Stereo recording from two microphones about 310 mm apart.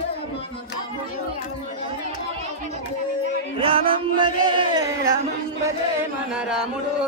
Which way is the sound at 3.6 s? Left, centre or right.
Centre.